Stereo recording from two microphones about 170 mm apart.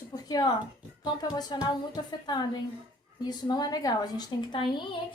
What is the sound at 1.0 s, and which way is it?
A woman's voice, 25° left (ahead or behind).